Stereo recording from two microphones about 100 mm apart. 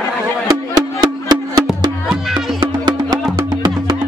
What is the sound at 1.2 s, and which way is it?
Music, 45° right (ahead or behind).